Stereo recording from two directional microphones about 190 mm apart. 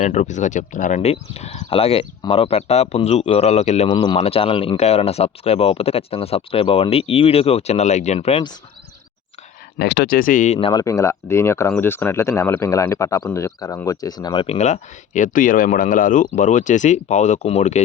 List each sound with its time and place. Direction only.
0.0 s speech: 40° left (ahead or behind)
9.7 s speech: 60° left (ahead or behind); by 10.6 s 40° left (ahead or behind)
10.6 s speech: 20° left (ahead or behind); by 17.8 s 35° left (ahead or behind)